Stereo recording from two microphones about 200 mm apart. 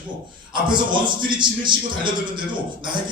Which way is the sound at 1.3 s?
25° right (ahead or behind).